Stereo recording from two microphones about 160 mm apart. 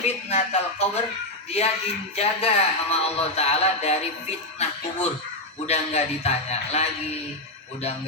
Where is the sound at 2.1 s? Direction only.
40° left (ahead or behind).